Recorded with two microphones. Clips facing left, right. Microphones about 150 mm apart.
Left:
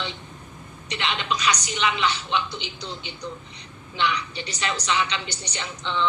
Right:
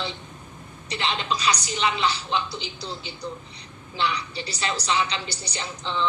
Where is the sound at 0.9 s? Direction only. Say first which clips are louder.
Even; 35° right (ahead or behind).